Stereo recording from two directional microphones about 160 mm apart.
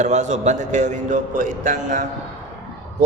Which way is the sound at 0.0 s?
45° right (ahead or behind).